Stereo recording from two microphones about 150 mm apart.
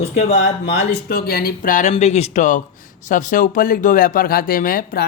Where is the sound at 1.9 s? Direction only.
45° left (ahead or behind); by 5.0 s 70° left (ahead or behind).